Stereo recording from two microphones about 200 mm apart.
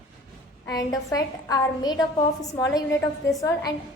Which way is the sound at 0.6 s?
20° left (ahead or behind).